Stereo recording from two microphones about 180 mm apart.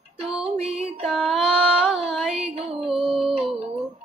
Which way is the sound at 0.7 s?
35° right (ahead or behind).